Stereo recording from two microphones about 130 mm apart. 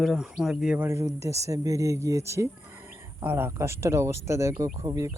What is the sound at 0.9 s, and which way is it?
Speech, 25° right (ahead or behind).